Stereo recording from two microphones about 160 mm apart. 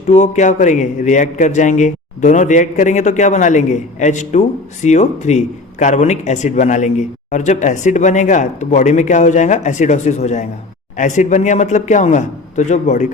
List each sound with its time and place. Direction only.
0.1 s a man's voice: 45° left (ahead or behind)